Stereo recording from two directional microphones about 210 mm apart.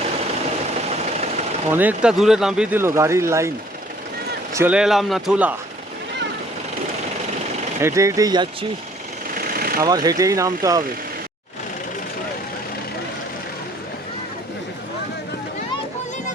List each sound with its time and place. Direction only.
1.7 s speech: 10° right (ahead or behind)
4.5 s a man's voice: 5° right (ahead or behind)
7.8 s speech: 15° right (ahead or behind)
9.4 s vehicle: 45° right (ahead or behind)
9.8 s speech: 15° right (ahead or behind)